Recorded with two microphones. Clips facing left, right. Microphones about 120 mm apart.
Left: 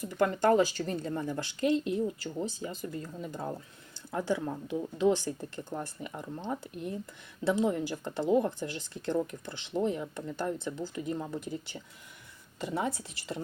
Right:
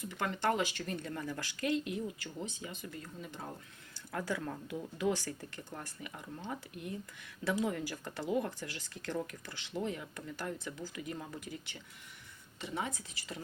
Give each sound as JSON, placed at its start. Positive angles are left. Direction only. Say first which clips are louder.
{"t": 0.0, "sound": "speech", "louder": "left 8 dB", "side_deg": 40}
{"t": 4.1, "sound": "speech", "louder": "left 6 dB", "side_deg": 20}